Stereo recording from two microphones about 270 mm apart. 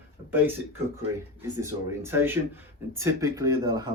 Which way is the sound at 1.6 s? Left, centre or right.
Centre.